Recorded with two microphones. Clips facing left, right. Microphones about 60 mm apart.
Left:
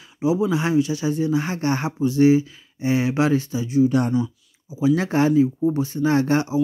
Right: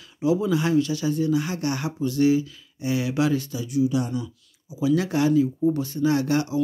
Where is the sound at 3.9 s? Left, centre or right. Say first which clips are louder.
Left 5 dB; left.